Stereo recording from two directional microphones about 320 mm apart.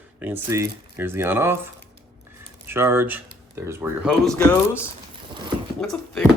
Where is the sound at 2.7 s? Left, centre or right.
Centre.